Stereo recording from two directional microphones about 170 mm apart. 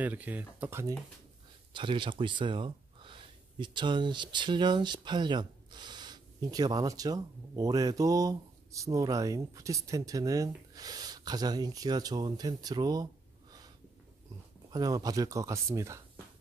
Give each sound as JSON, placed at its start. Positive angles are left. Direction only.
{"t": 0.0, "sound": "speech", "side_deg": -10}
{"t": 1.7, "sound": "speech", "side_deg": -30}
{"t": 14.7, "sound": "speech", "side_deg": -20}